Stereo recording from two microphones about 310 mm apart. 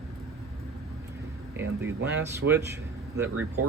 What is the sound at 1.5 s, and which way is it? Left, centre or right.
Speech, centre.